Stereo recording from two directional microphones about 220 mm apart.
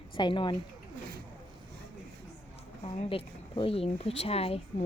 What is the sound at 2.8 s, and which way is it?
Speech, 25° left (ahead or behind).